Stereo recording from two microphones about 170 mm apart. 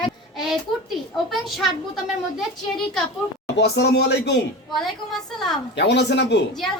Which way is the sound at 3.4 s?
85° left.